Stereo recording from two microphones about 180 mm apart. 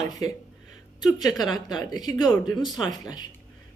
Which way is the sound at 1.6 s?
20° left (ahead or behind).